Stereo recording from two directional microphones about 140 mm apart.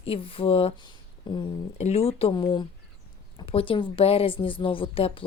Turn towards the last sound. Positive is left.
turn(degrees=40)  # may be behind; listen again after turning